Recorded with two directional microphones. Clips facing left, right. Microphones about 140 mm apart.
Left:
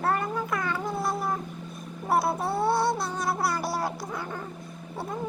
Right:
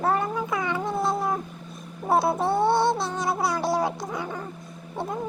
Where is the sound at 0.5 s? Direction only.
20° right (ahead or behind).